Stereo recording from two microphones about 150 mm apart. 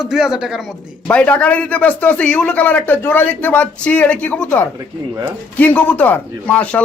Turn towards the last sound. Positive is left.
turn(degrees=10)  # may be behind; listen again after turning